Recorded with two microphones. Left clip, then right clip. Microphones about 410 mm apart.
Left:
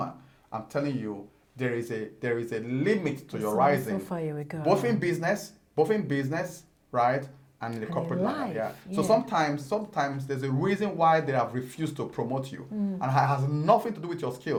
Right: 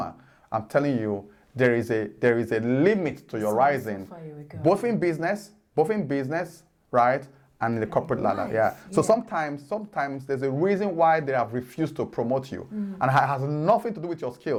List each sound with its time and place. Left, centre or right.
0.5 s a man's voice: right
4.6 s a man's voice: right
13.0 s a man's voice: right
13.8 s speech: right